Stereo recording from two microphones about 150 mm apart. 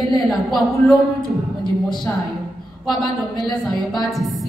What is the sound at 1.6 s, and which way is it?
Speech, 30° left (ahead or behind).